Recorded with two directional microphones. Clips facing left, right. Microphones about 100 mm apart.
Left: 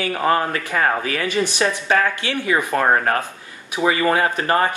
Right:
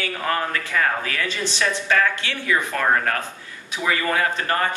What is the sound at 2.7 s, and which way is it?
Speech, 30° left (ahead or behind).